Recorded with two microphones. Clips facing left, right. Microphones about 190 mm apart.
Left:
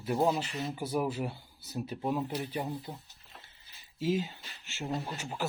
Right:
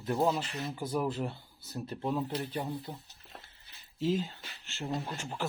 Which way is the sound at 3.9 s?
5° left (ahead or behind).